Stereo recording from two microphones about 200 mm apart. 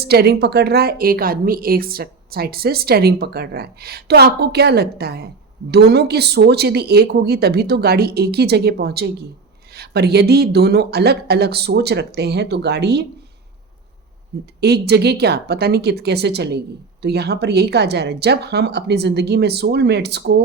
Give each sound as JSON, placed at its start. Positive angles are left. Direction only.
{"t": 0.0, "sound": "a woman's voice", "side_deg": -50}
{"t": 14.6, "sound": "a woman's voice", "side_deg": -55}